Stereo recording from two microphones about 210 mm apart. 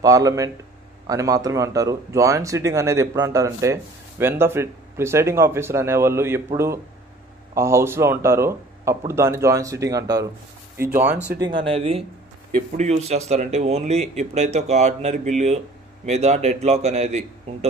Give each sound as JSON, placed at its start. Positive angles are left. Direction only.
{"t": 0.0, "sound": "speech", "side_deg": -15}
{"t": 11.3, "sound": "speech", "side_deg": -20}